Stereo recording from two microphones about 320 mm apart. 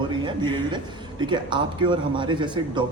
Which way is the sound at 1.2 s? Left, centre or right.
Centre.